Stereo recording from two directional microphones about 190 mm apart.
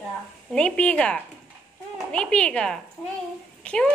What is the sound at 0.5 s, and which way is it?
A woman's voice, 5° left (ahead or behind).